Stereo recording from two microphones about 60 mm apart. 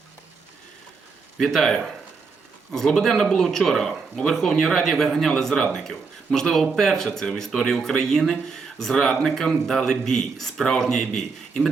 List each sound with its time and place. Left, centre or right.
1.4 s speech: centre